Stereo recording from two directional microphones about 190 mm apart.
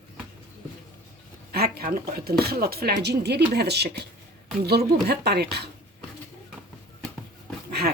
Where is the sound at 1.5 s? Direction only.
55° right (ahead or behind).